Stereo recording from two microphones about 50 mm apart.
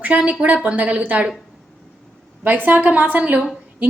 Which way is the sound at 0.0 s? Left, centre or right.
Right.